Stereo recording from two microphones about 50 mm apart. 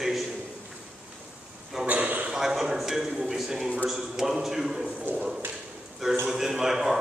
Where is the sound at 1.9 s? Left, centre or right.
Right.